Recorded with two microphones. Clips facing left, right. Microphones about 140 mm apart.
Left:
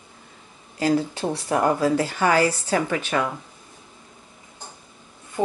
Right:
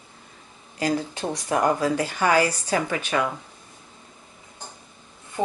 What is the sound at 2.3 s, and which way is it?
Speech, 15° right (ahead or behind).